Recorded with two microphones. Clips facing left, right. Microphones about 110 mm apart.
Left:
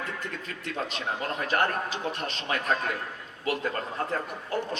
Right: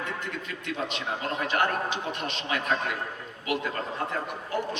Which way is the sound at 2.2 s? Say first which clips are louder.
Even; 40° left (ahead or behind).